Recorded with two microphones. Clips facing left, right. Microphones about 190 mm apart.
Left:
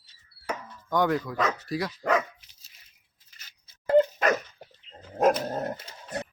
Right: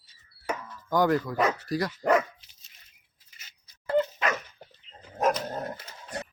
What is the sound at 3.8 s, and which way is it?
Dog, 40° left (ahead or behind).